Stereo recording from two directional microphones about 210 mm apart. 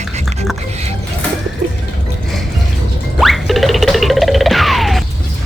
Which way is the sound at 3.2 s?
Centre (ahead or behind).